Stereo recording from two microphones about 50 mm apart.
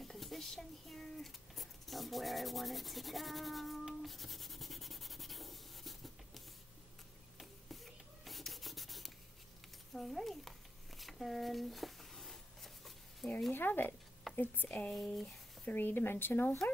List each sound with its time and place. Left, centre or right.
0.0 s a sound: centre
0.6 s speech: centre
4.0 s sanding: centre
7.3 s rub: centre
9.9 s speech: centre
11.0 s a sound: centre
13.5 s speech: left